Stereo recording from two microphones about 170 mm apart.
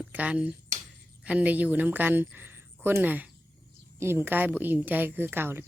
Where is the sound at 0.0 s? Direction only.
10° right (ahead or behind).